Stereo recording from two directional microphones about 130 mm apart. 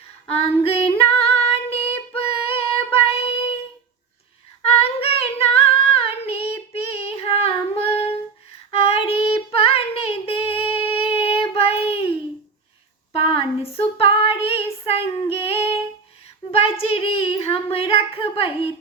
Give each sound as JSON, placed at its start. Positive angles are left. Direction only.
{"t": 0.3, "sound": "female singing", "side_deg": 50}
{"t": 4.6, "sound": "child singing", "side_deg": 45}
{"t": 8.7, "sound": "female singing", "side_deg": 45}
{"t": 13.1, "sound": "female singing", "side_deg": 45}
{"t": 16.5, "sound": "child singing", "side_deg": 50}